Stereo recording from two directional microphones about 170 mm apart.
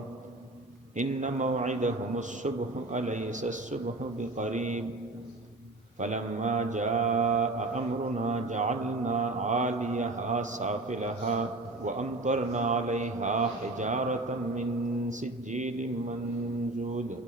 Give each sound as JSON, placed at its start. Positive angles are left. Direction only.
{"t": 0.9, "sound": "mantra", "side_deg": -45}
{"t": 6.0, "sound": "mantra", "side_deg": -45}